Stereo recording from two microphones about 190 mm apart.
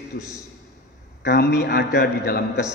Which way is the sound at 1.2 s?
60° left (ahead or behind).